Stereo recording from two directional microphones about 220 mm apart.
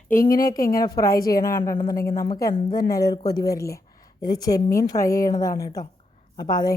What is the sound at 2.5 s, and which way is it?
Speech, 45° left (ahead or behind).